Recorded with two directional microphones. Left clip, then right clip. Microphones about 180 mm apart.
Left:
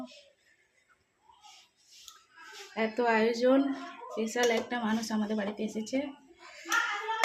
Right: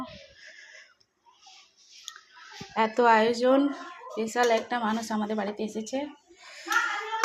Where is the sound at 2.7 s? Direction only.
10° right (ahead or behind).